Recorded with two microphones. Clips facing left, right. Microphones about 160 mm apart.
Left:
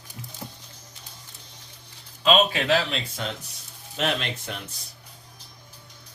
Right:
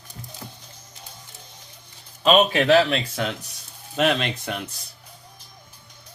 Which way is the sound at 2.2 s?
50° right (ahead or behind).